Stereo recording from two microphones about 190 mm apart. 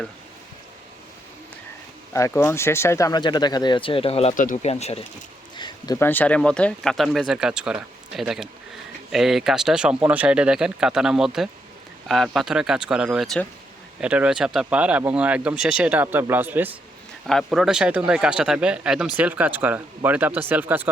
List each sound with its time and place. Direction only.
2.1 s speech: 15° left (ahead or behind); by 5.0 s 35° left (ahead or behind)
5.5 s speech: 20° left (ahead or behind); by 16.7 s 10° right (ahead or behind)
17.2 s speech: centre (ahead or behind)